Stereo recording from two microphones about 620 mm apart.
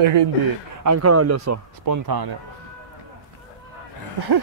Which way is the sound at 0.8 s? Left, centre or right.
Right.